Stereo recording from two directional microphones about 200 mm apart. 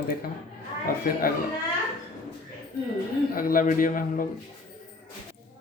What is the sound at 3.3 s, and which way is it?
Speech, 45° left (ahead or behind).